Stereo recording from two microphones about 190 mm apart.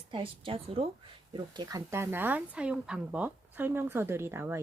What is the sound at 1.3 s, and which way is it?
Speech, 20° right (ahead or behind).